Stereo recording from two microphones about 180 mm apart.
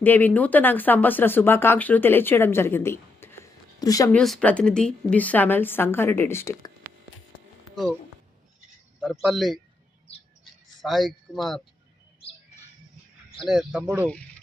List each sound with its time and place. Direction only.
0.0 s speech: 10° left (ahead or behind)
4.1 s speech: centre (ahead or behind)
9.0 s speech: centre (ahead or behind)
10.4 s a sound: centre (ahead or behind)
13.4 s speech: centre (ahead or behind)